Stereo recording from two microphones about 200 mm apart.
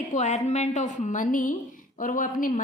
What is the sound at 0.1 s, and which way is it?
A woman's voice, 35° left (ahead or behind).